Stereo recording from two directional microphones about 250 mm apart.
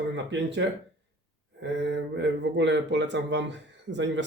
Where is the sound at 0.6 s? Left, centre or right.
Right.